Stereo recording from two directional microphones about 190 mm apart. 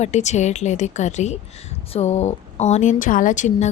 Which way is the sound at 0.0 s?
35° left (ahead or behind).